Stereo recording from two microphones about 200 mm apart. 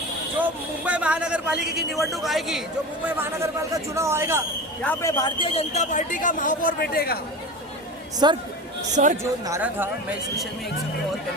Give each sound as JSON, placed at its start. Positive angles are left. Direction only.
{"t": 0.9, "sound": "a man's voice", "side_deg": -5}
{"t": 4.8, "sound": "a man's voice", "side_deg": 10}
{"t": 8.2, "sound": "speech", "side_deg": -20}
{"t": 9.0, "sound": "speech", "side_deg": -40}
{"t": 9.5, "sound": "a man's voice", "side_deg": -10}